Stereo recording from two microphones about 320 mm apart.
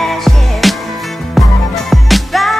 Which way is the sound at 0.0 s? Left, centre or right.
Centre.